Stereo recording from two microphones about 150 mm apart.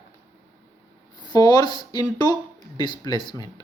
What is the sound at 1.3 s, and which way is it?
Speech, 30° left (ahead or behind).